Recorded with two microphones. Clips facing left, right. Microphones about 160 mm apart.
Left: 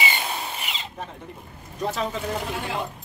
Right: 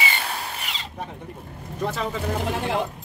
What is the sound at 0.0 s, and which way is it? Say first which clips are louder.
Tools: left 1 dB; 10° left (ahead or behind).